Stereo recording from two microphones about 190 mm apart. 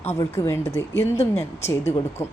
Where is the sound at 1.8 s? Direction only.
35° left (ahead or behind).